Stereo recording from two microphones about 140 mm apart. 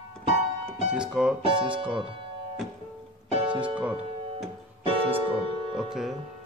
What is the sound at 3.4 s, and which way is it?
Speech, 10° right (ahead or behind).